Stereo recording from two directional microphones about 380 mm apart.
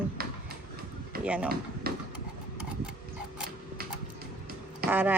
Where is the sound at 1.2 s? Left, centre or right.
Centre.